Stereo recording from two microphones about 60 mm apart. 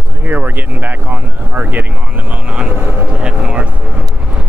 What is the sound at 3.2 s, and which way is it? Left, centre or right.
Vehicle, centre.